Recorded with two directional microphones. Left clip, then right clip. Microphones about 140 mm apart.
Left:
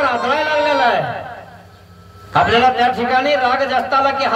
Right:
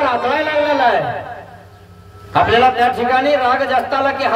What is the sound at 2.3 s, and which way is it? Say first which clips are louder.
A man's voice: right 1 dB; 20° left (ahead or behind).